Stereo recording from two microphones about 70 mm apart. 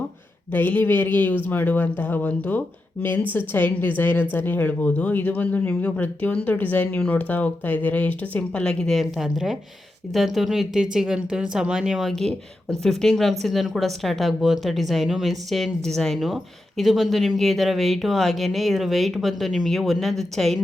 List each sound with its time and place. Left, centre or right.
0.5 s a woman's voice: left
9.0 s speech: centre
12.0 s speech: centre